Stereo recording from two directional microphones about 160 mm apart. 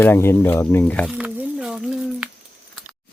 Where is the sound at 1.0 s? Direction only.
10° right (ahead or behind).